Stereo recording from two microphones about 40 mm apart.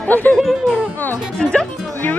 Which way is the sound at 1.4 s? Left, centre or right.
Left.